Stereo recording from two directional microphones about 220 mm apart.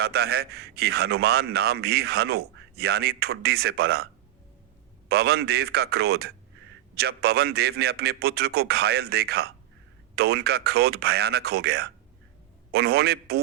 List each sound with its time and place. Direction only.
0.0 s a man's voice: 45° right (ahead or behind)